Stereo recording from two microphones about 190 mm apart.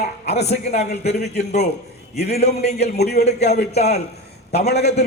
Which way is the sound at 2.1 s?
55° left (ahead or behind).